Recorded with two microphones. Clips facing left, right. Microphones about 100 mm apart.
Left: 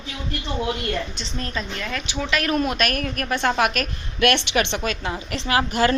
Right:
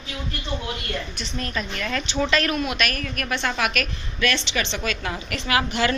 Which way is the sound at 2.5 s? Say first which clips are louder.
Left 3 dB; 40° left (ahead or behind).